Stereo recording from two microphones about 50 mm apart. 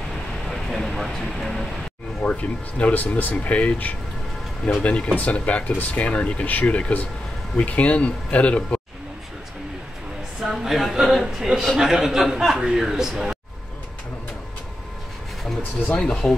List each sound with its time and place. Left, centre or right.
0.5 s a sound: centre
2.8 s speech: left
4.8 s speech: left
5.1 s speech: left
10.4 s a man's voice: centre
15.9 s speech: centre